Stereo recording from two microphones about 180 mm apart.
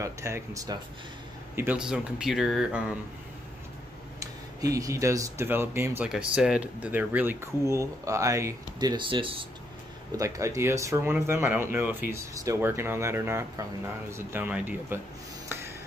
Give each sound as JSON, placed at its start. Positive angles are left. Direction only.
{"t": 0.0, "sound": "speech", "side_deg": -15}
{"t": 4.2, "sound": "speech", "side_deg": -20}
{"t": 10.1, "sound": "speech", "side_deg": -20}
{"t": 15.4, "sound": "a sound", "side_deg": -15}